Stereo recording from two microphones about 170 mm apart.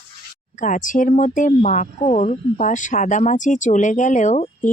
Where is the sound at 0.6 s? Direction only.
50° left (ahead or behind).